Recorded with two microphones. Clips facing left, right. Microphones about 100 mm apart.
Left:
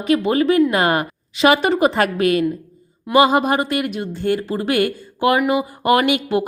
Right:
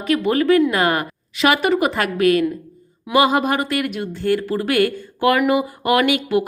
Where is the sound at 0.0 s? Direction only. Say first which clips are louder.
Left 1 dB; 20° left (ahead or behind).